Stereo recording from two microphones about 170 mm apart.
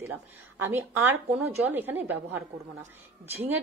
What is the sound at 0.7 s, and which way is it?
A woman's voice, 15° right (ahead or behind).